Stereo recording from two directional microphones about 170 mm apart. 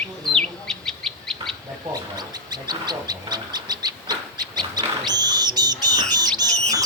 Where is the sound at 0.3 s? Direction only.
5° left (ahead or behind).